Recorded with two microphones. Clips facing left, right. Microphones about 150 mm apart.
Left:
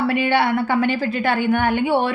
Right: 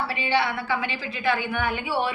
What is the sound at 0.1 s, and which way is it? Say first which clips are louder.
A woman's voice: left 7 dB; 50° left (ahead or behind).